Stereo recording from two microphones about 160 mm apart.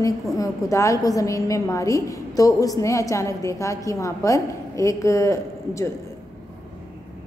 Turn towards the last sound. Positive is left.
turn(degrees=20)  # may be behind; listen again after turning